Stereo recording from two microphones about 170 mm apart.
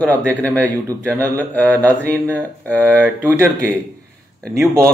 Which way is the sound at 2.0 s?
10° right (ahead or behind).